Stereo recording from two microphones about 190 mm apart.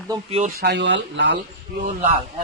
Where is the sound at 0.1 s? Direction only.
30° right (ahead or behind).